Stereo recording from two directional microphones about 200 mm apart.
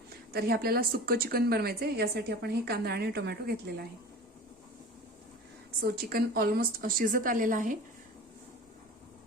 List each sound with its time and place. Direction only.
0.3 s a woman's voice: 50° right (ahead or behind)
5.8 s a woman's voice: 50° right (ahead or behind)